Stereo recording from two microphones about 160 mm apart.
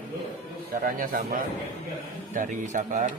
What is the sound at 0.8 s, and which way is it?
A man's voice, 60° right (ahead or behind).